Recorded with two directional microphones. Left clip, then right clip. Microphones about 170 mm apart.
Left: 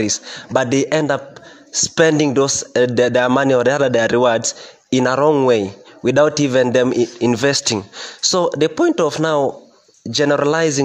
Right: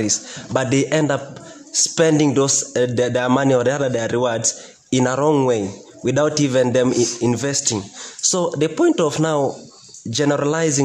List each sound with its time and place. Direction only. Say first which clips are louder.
0.0 s a man's voice: left 2 dB; 40° left (ahead or behind)